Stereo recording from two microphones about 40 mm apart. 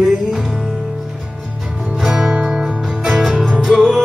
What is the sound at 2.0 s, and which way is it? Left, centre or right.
Music, centre.